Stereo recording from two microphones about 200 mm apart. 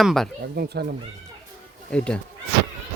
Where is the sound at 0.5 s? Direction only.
55° right (ahead or behind).